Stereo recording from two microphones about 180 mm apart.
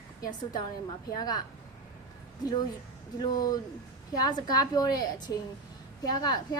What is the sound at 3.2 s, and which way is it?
A woman's voice, 25° left (ahead or behind).